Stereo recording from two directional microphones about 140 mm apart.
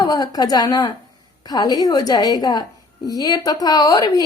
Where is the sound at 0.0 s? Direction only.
25° left (ahead or behind).